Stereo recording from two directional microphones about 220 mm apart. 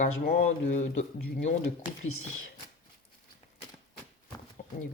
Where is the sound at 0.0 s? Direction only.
40° left (ahead or behind).